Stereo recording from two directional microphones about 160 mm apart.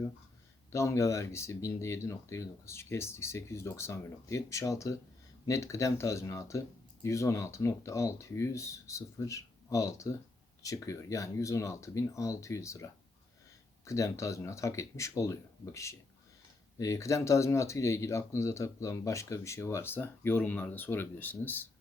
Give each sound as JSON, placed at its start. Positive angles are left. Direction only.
{"t": 0.7, "sound": "speech", "side_deg": 20}